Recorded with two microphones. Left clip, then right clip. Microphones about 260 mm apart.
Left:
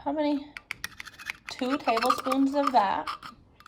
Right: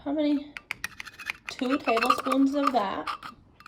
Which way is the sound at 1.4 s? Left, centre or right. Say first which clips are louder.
Even; centre.